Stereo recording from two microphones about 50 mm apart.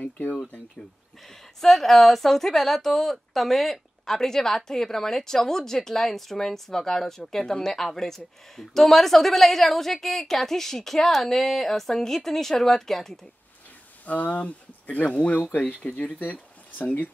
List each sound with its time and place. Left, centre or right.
1.2 s speech: centre
14.0 s speech: left
16.0 s speech: left